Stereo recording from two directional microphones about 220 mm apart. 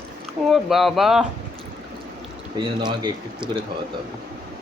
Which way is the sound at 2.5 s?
20° right (ahead or behind).